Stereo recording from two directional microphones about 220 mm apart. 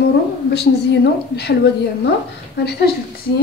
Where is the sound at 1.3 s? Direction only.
50° left (ahead or behind).